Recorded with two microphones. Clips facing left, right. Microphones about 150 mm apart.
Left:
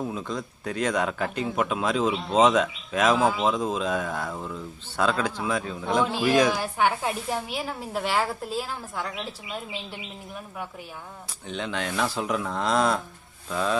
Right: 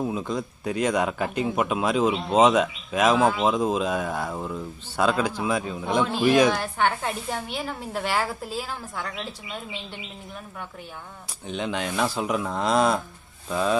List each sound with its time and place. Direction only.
0.0 s speech: 10° right (ahead or behind)
3.2 s speech: 5° left (ahead or behind)
3.4 s speech: 10° right (ahead or behind)
6.5 s speech: 5° left (ahead or behind)
11.4 s speech: 15° right (ahead or behind)